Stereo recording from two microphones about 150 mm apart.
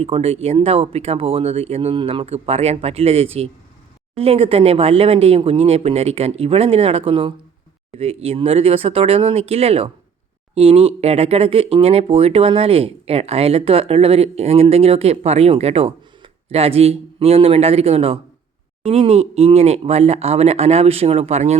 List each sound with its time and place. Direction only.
0.0 s speech: 40° right (ahead or behind)